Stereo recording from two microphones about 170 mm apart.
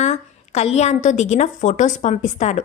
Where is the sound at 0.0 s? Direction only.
40° left (ahead or behind).